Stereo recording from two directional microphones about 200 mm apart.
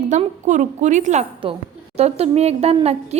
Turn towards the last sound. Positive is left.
turn(degrees=-30)  # may be behind; listen again after turning